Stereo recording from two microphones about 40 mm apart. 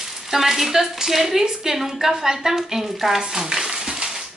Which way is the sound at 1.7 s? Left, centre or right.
Centre.